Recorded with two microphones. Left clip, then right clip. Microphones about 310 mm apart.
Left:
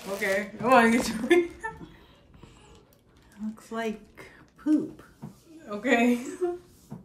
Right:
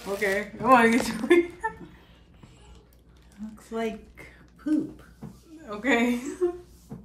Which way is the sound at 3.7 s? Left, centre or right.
Centre.